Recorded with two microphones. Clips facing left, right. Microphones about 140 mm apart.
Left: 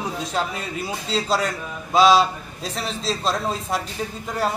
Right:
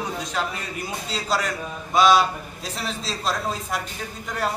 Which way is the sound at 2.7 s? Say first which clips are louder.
Left 4 dB; centre (ahead or behind).